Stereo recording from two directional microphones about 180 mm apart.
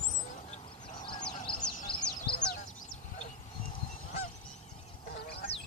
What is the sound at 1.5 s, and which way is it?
Music, 30° left (ahead or behind).